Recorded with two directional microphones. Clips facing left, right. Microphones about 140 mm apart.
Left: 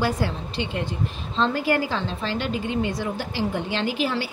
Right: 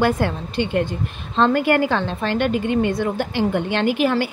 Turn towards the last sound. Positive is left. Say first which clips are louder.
# right 6 dB
turn(degrees=-55)  # may be behind; listen again after turning